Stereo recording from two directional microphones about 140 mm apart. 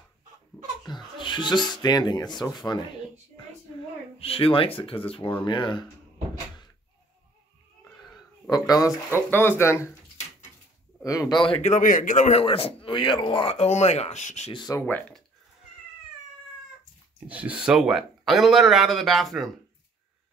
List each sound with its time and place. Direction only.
0.8 s a sound: 35° left (ahead or behind)
1.7 s speech: 30° left (ahead or behind)
4.2 s speech: 40° left (ahead or behind)
8.5 s speech: 25° left (ahead or behind)
9.3 s speech: 15° left (ahead or behind)
11.1 s speech: 25° left (ahead or behind)
11.6 s speech: 65° left (ahead or behind)
12.4 s speech: 40° left (ahead or behind); by 14.5 s 55° left (ahead or behind)
14.5 s speech: 30° left (ahead or behind)
14.9 s speech: 10° left (ahead or behind)
17.3 s speech: 10° right (ahead or behind)